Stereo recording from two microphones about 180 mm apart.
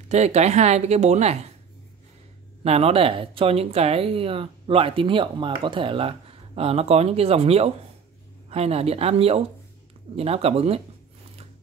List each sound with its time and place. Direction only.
0.1 s speech: 40° right (ahead or behind)
2.6 s speech: 35° right (ahead or behind)